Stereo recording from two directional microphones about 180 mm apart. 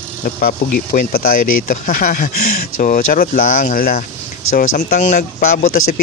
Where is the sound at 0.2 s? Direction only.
50° left (ahead or behind).